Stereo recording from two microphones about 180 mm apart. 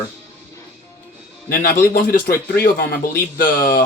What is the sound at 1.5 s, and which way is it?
Speech, 55° left (ahead or behind).